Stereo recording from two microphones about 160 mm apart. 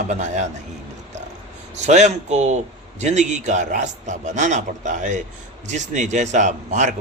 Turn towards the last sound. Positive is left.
turn(degrees=-45)  # may be behind; listen again after turning